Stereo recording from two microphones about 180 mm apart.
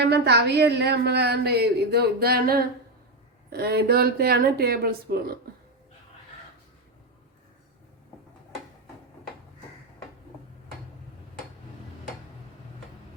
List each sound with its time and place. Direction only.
0.0 s a woman's voice: 65° right (ahead or behind)